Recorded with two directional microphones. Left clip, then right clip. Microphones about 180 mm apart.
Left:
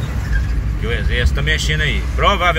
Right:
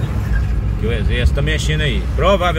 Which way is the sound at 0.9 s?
25° right (ahead or behind).